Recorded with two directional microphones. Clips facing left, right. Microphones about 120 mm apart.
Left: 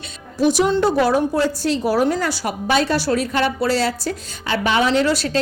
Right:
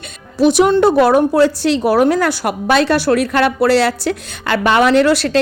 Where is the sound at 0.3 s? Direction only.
70° right (ahead or behind).